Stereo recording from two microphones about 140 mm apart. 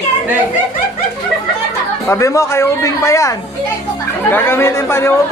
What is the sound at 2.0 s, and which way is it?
A man's voice, 20° left (ahead or behind).